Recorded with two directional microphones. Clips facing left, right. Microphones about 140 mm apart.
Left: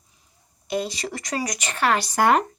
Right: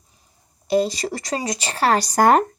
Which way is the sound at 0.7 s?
35° right (ahead or behind).